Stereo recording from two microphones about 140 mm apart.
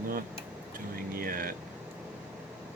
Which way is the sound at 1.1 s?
90° right.